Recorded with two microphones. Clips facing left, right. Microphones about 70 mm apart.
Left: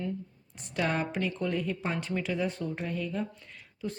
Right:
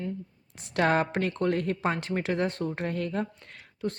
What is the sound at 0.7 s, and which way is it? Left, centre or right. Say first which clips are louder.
A woman's voice: right 5 dB; right.